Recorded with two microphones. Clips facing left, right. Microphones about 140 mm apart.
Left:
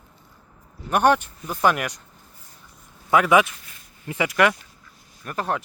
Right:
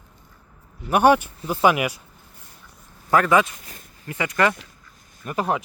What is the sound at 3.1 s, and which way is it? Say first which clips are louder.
Speech: left 1 dB; 5° left (ahead or behind).